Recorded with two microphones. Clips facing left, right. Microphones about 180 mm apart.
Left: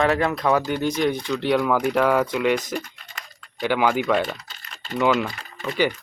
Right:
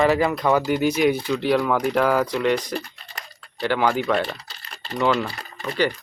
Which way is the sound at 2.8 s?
35° right (ahead or behind).